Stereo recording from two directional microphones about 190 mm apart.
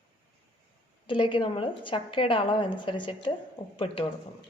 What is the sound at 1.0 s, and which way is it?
A woman's voice, 25° left (ahead or behind).